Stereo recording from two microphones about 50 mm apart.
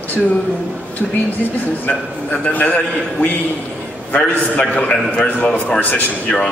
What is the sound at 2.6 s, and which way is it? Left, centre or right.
Speech, left.